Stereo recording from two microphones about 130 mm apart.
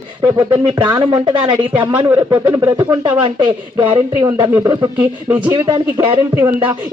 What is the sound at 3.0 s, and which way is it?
Speech, 40° right (ahead or behind).